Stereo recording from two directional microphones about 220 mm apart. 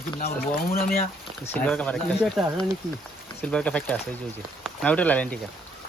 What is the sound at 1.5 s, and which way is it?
Speech, 5° left (ahead or behind).